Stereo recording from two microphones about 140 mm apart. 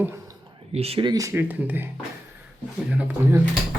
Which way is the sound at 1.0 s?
25° right (ahead or behind).